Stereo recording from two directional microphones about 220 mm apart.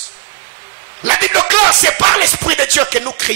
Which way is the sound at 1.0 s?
10° right (ahead or behind).